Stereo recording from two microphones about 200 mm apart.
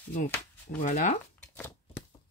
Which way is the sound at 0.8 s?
40° left (ahead or behind).